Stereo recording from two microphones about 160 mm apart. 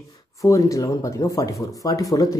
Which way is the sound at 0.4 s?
20° left (ahead or behind).